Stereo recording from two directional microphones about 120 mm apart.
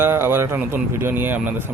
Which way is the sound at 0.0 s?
20° right (ahead or behind).